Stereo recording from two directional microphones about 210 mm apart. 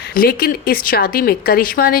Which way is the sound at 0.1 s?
45° left (ahead or behind).